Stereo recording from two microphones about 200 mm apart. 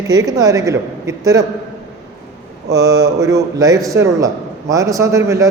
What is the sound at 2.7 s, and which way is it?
A man's voice, 15° right (ahead or behind).